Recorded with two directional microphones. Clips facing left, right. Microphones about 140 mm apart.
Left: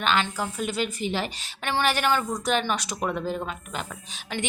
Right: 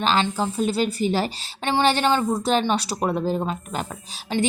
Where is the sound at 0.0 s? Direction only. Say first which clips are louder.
Right 4 dB; 30° right (ahead or behind).